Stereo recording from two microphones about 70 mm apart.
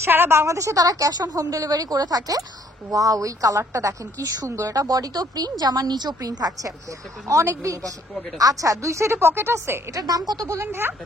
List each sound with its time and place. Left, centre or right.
0.0 s a woman's voice: right
7.2 s a woman's voice: right
10.0 s a woman's voice: right
10.7 s speech: right